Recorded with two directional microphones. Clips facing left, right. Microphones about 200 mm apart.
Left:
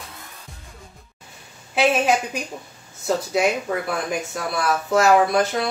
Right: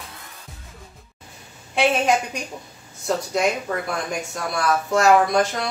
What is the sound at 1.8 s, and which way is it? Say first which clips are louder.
Speech: even; 5° left (ahead or behind).